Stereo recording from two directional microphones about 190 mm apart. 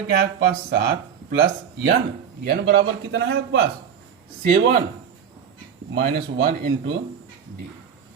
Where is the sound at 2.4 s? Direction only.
65° right (ahead or behind).